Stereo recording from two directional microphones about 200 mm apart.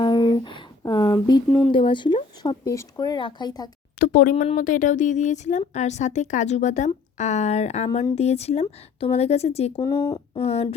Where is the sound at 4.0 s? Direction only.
45° left (ahead or behind); by 9.7 s 30° left (ahead or behind).